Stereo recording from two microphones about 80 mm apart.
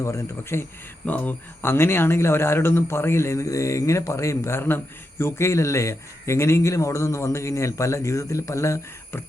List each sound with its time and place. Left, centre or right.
0.0 s speech: left
1.0 s speech: left